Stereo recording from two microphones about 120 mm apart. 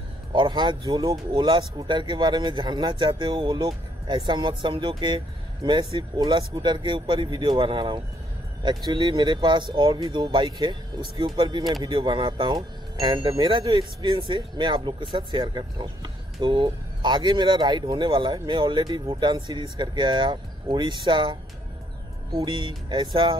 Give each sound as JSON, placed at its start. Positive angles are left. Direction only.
{"t": 0.3, "sound": "speech", "side_deg": -40}